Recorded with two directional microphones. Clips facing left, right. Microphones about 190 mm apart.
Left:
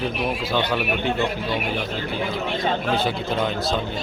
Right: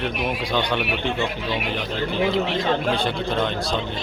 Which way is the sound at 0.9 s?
45° left (ahead or behind).